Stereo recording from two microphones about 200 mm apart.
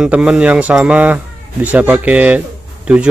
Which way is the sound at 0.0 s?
5° right (ahead or behind).